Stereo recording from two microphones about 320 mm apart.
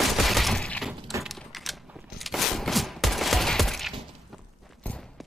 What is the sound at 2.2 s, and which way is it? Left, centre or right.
Fusillade, centre.